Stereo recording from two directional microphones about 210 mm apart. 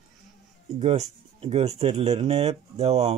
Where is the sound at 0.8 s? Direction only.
30° right (ahead or behind).